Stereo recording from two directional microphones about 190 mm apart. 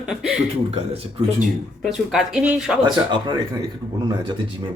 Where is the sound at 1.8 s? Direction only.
Centre (ahead or behind).